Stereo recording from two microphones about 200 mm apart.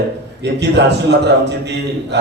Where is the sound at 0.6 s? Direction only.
60° right (ahead or behind).